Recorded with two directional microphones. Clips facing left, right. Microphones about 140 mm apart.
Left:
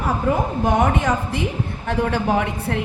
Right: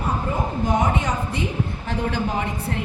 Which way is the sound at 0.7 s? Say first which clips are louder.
Left 4 dB; 65° left (ahead or behind).